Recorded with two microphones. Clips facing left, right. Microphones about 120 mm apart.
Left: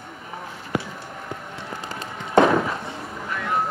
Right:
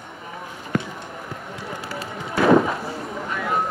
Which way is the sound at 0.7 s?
10° left (ahead or behind).